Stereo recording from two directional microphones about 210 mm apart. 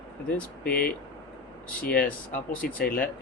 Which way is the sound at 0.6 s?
45° left (ahead or behind).